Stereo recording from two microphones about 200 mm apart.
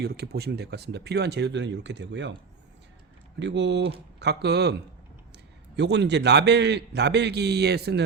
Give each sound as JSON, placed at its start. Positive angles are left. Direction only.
{"t": 0.0, "sound": "a man's voice", "side_deg": -50}
{"t": 3.3, "sound": "a man's voice", "side_deg": -60}